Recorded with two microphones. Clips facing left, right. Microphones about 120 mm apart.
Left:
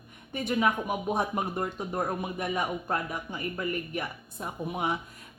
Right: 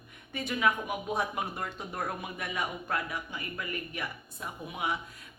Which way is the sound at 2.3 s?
40° left (ahead or behind).